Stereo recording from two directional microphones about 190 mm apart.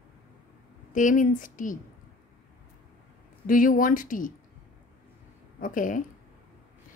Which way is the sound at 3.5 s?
45° left (ahead or behind).